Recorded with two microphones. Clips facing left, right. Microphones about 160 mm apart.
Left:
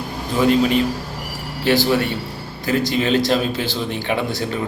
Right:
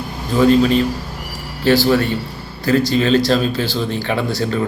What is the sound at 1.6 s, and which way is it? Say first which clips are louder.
Speech: right 3 dB; 20° left (ahead or behind).